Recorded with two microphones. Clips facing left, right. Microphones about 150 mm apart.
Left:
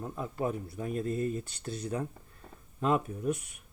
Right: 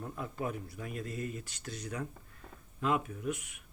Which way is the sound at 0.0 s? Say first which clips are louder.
Left 4 dB; 30° left (ahead or behind).